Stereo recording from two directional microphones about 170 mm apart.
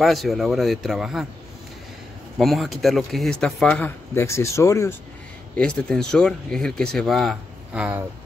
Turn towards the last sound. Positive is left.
turn(degrees=-5)  # may be behind; listen again after turning